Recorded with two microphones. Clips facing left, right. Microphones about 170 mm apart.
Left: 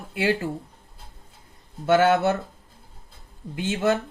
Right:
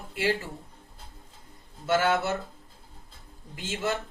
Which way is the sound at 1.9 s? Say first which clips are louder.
Left 6 dB; 55° left (ahead or behind).